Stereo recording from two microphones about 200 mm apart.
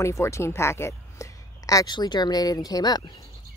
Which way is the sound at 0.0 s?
15° left (ahead or behind).